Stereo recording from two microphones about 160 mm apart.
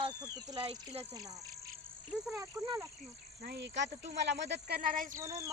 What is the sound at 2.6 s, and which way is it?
Speech, 25° right (ahead or behind).